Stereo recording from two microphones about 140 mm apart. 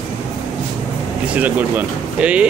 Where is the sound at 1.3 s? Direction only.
10° right (ahead or behind).